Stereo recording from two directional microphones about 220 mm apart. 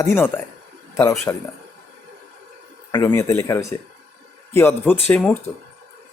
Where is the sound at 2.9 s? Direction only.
15° left (ahead or behind).